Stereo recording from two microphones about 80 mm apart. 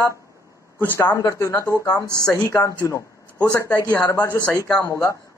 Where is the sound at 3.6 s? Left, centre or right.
Left.